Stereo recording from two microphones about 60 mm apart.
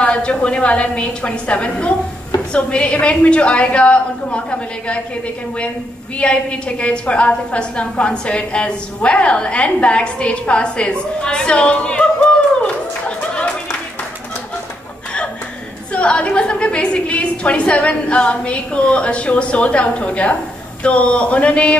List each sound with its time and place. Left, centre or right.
0.0 s a woman's voice: centre
6.1 s a woman's voice: centre
13.3 s clapping: centre
15.9 s a woman's voice: left